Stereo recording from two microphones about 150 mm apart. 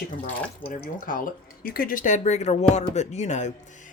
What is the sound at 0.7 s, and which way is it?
Speech, 65° left (ahead or behind).